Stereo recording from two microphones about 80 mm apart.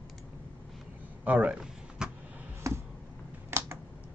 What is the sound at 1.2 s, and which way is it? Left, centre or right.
Speech, centre.